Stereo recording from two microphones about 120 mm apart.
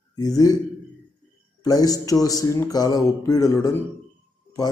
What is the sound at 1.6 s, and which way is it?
Speech, 30° left (ahead or behind).